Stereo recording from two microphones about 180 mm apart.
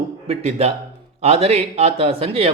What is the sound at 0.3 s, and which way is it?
Speech, 35° right (ahead or behind).